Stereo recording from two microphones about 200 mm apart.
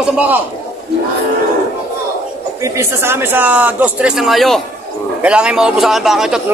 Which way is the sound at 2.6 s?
15° right (ahead or behind).